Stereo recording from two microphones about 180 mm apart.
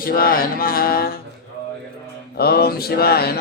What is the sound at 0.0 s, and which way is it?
Mantra, 55° left (ahead or behind).